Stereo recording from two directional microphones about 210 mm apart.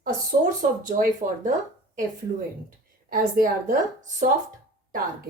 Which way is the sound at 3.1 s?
40° right (ahead or behind).